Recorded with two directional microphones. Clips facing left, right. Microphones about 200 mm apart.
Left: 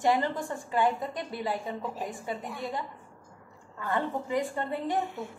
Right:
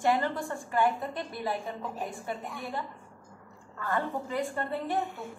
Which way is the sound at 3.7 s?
20° left (ahead or behind).